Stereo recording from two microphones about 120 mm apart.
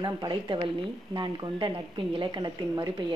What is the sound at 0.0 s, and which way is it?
A woman's voice, 40° right (ahead or behind).